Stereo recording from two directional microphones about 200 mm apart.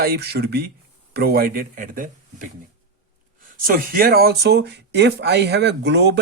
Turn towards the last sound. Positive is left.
turn(degrees=-60)  # may be behind; listen again after turning